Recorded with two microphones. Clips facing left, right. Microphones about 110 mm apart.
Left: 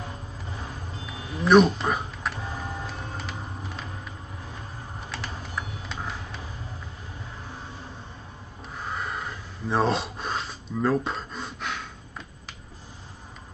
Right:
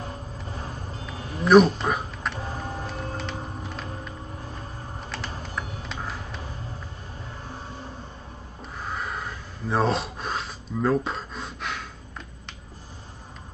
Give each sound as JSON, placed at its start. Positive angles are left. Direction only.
{"t": 0.5, "sound": "vehicle", "side_deg": -40}
{"t": 1.1, "sound": "a sound", "side_deg": -40}
{"t": 1.4, "sound": "speech", "side_deg": 0}
{"t": 2.3, "sound": "printer", "side_deg": -35}
{"t": 2.9, "sound": "music", "side_deg": 0}
{"t": 5.4, "sound": "music", "side_deg": 0}
{"t": 8.7, "sound": "gasp", "side_deg": 0}